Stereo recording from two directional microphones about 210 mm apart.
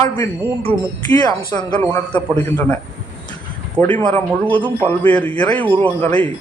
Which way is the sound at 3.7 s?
10° left (ahead or behind).